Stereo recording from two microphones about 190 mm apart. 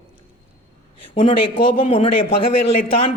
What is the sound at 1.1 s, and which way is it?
A man's voice, 30° left (ahead or behind).